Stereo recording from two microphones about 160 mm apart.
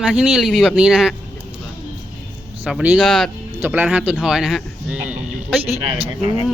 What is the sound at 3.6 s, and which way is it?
Speech, 10° right (ahead or behind).